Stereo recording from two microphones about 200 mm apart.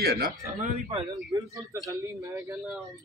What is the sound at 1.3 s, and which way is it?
A man's voice, 15° right (ahead or behind).